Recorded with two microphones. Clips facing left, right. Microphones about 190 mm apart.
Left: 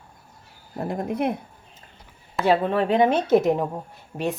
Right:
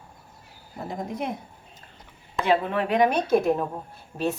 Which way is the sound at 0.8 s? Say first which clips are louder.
Left 6 dB; 60° left (ahead or behind).